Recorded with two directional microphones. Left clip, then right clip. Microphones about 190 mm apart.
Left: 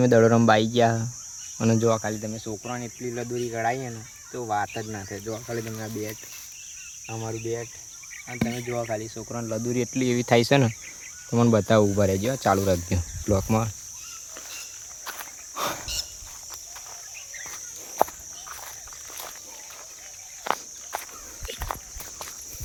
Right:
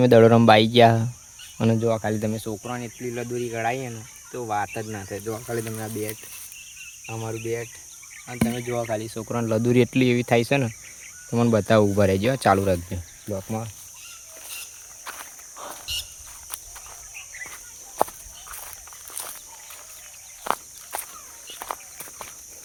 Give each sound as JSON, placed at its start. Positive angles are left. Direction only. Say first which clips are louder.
{"t": 0.0, "sound": "speech", "louder": "right 4 dB", "side_deg": -5}
{"t": 2.1, "sound": "speech", "louder": "right 6 dB", "side_deg": -45}
{"t": 2.6, "sound": "speech", "louder": "right 1 dB", "side_deg": -10}
{"t": 7.1, "sound": "speech", "louder": "right 2 dB", "side_deg": -5}
{"t": 9.1, "sound": "speech", "louder": "right 6 dB", "side_deg": -55}
{"t": 10.2, "sound": "speech", "louder": "left 1 dB", "side_deg": 5}
{"t": 11.9, "sound": "speech", "louder": "right 3 dB", "side_deg": -10}
{"t": 13.2, "sound": "speech", "louder": "left 6 dB", "side_deg": 45}
{"t": 15.9, "sound": "dog", "louder": "right 2 dB", "side_deg": -25}
{"t": 20.4, "sound": "walk", "louder": "right 1 dB", "side_deg": -15}